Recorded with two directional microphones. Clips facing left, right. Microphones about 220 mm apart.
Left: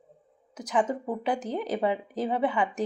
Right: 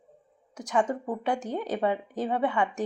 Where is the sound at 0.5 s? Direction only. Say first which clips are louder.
Even; 20° left (ahead or behind).